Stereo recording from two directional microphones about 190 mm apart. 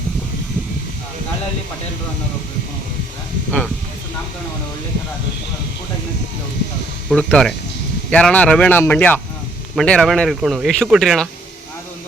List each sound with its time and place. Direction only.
7.1 s speech: 5° left (ahead or behind)